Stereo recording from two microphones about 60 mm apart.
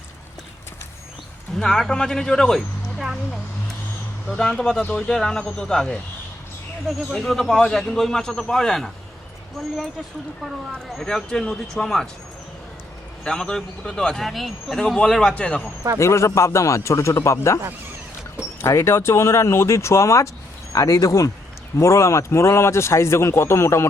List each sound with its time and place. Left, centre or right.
1.5 s speech: centre
4.3 s speech: centre
7.2 s speech: centre
10.4 s speech: centre
13.2 s speech: centre
14.2 s speech: centre
14.8 s speech: centre
15.4 s speech: left
16.0 s a man's voice: left
18.6 s a man's voice: left